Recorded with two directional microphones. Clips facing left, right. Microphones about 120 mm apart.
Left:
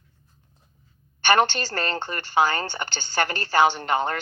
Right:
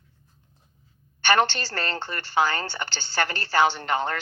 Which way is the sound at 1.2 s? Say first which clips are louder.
Left 2 dB; 15° left (ahead or behind).